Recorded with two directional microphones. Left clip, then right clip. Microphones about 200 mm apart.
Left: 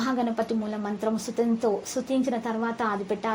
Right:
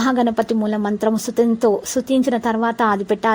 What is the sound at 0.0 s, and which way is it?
Speech, 45° right (ahead or behind).